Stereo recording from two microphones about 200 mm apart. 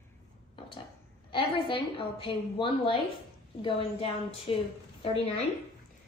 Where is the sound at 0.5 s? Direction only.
25° left (ahead or behind).